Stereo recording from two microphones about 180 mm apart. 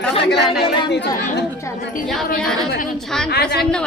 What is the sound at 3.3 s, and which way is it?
Speech, 60° left (ahead or behind).